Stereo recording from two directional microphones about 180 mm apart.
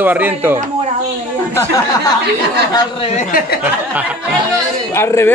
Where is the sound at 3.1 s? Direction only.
55° left (ahead or behind).